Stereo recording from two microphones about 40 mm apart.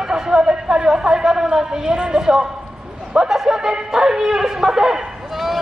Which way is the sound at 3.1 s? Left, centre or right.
Centre.